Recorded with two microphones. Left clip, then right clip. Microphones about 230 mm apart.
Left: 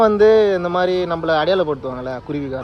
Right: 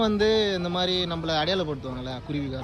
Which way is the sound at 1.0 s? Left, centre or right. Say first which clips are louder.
Left 9 dB; left.